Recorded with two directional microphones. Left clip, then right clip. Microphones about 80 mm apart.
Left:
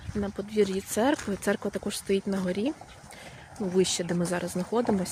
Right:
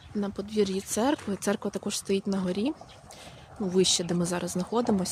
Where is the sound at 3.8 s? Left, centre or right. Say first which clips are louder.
Right 1 dB; right.